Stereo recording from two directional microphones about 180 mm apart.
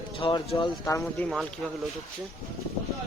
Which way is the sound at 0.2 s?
30° left (ahead or behind).